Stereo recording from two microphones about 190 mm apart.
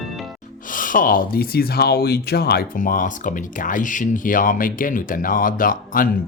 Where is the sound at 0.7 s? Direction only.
45° left (ahead or behind).